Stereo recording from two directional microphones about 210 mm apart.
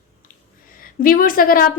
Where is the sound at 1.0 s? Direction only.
40° left (ahead or behind).